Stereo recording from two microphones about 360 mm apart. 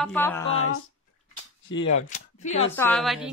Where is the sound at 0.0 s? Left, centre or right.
Centre.